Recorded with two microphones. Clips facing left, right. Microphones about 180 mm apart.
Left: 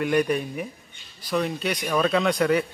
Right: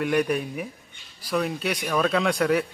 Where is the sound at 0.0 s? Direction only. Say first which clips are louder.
Left 1 dB; centre (ahead or behind).